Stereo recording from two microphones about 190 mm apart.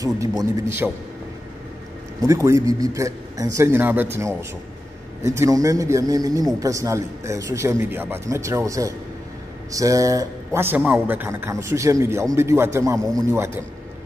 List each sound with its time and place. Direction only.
0.0 s a man's voice: 20° right (ahead or behind)
2.2 s a man's voice: 15° right (ahead or behind)